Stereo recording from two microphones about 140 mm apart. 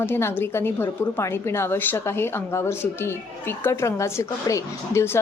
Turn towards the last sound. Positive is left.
turn(degrees=20)  # may be behind; listen again after turning